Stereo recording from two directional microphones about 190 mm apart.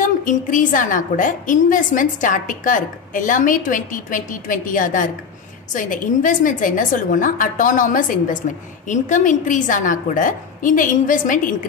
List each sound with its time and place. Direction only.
0.0 s a woman's voice: 45° left (ahead or behind)